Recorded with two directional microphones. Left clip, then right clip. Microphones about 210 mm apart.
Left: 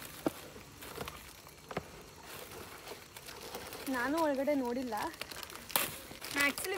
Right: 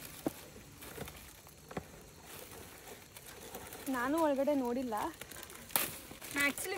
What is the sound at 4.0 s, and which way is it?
Speech, 40° right (ahead or behind).